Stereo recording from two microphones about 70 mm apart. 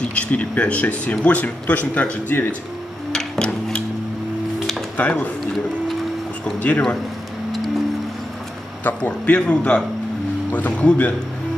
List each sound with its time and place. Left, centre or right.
0.0 s speech: centre
3.1 s a sound: centre
4.9 s speech: left
6.6 s speech: centre
8.8 s a man's voice: left